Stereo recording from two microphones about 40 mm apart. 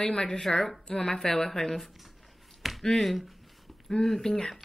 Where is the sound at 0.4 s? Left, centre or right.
Centre.